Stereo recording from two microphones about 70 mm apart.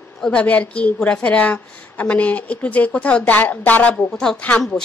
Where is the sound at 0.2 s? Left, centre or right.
Centre.